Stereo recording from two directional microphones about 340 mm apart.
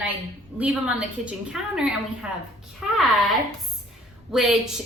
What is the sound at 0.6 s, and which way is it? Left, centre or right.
A woman's voice, centre.